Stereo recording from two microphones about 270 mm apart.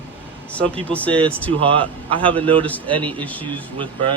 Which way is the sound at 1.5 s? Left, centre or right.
Centre.